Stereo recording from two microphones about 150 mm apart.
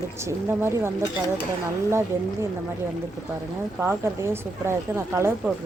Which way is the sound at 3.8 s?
15° right (ahead or behind).